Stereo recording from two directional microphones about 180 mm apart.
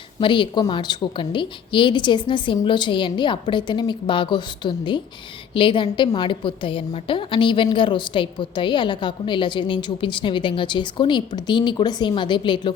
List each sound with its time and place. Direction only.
0.2 s a woman's voice: 25° left (ahead or behind)